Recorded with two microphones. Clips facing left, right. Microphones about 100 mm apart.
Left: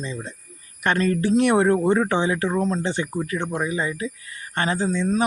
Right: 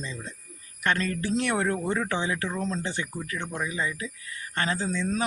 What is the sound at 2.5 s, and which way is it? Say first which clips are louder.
Speech: left 8 dB; 50° left (ahead or behind).